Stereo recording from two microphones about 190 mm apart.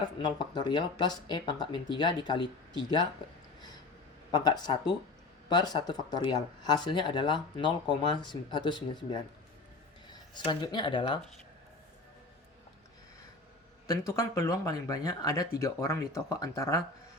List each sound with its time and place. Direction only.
0.2 s speech: 25° left (ahead or behind)
4.3 s speech: 20° left (ahead or behind)
13.8 s speech: 20° left (ahead or behind)